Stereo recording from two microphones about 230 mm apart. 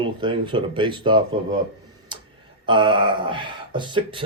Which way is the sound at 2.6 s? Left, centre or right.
Right.